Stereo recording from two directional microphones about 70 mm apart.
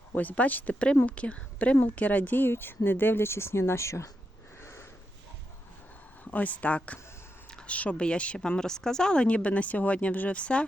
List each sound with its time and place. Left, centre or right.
0.2 s a woman's voice: left
4.6 s sniff: left
6.3 s a woman's voice: left